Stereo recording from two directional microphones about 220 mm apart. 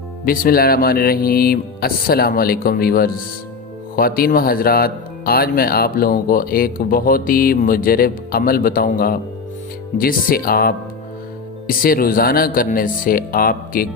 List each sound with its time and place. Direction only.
0.3 s speech: 40° left (ahead or behind)